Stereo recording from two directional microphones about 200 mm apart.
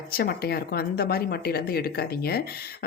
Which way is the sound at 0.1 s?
50° left (ahead or behind).